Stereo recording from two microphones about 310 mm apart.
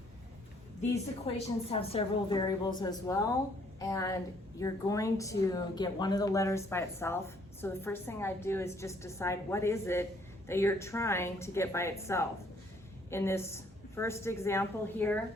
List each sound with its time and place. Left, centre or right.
1.3 s speech: centre